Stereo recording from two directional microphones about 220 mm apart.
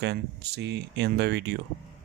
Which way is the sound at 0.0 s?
50° right (ahead or behind).